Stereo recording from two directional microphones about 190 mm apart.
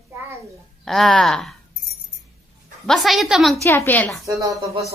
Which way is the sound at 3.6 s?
10° left (ahead or behind).